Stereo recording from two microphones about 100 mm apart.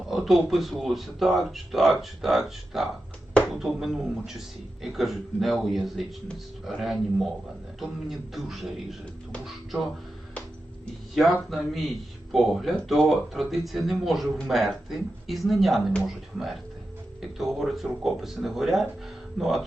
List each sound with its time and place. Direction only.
0.1 s speech: centre (ahead or behind)
11.1 s speech: centre (ahead or behind)